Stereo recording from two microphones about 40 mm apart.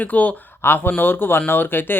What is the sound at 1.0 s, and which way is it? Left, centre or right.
Speech, left.